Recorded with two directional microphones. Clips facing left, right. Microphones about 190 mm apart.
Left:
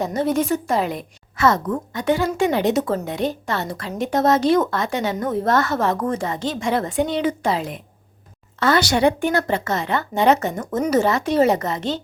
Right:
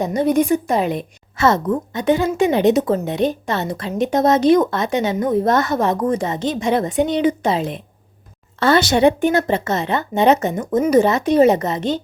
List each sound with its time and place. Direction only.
0.0 s a woman's voice: 15° right (ahead or behind)